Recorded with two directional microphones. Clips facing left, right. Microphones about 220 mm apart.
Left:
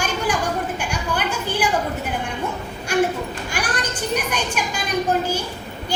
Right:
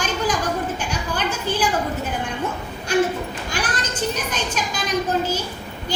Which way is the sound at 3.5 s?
10° left (ahead or behind).